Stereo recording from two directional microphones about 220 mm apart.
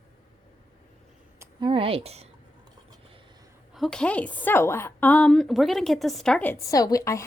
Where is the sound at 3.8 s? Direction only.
5° left (ahead or behind).